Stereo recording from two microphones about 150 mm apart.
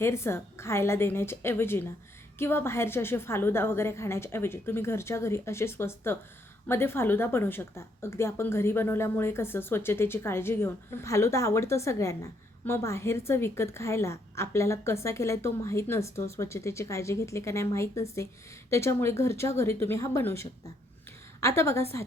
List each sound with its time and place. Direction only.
0.0 s a woman's voice: 15° left (ahead or behind)